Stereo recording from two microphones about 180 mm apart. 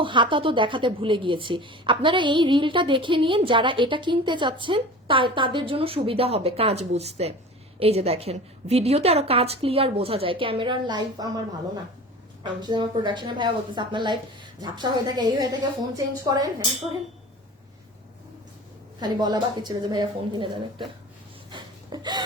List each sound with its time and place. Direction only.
0.0 s a woman's voice: 25° right (ahead or behind)
12.4 s a woman's voice: 25° right (ahead or behind)
18.9 s a woman's voice: 25° right (ahead or behind)
21.5 s a sound: 25° right (ahead or behind)